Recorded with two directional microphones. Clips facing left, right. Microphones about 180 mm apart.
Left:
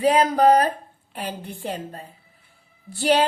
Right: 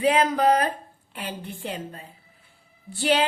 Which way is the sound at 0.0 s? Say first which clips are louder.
Left 3 dB; 35° left (ahead or behind).